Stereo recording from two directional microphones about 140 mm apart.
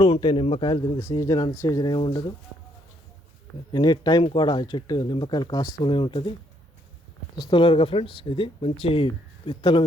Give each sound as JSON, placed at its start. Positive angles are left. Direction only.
{"t": 0.0, "sound": "speech", "side_deg": 35}
{"t": 0.9, "sound": "speech", "side_deg": 20}
{"t": 3.7, "sound": "speech", "side_deg": 30}
{"t": 7.4, "sound": "speech", "side_deg": 35}